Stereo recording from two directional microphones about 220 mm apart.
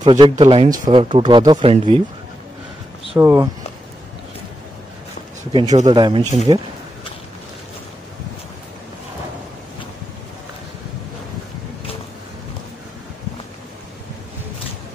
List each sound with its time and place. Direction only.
0.2 s speech: 25° right (ahead or behind)
3.2 s speech: 10° right (ahead or behind)
5.5 s speech: 25° right (ahead or behind)